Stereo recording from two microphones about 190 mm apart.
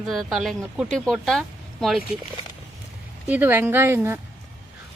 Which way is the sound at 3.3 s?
10° right (ahead or behind).